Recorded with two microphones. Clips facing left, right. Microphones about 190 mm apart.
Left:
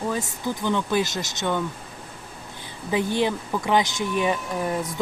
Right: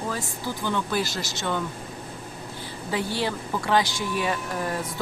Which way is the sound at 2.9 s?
20° left (ahead or behind).